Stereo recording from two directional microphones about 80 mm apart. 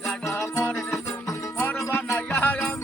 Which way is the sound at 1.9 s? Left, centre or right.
Left.